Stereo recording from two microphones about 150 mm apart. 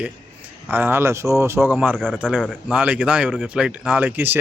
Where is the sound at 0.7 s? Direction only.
15° right (ahead or behind).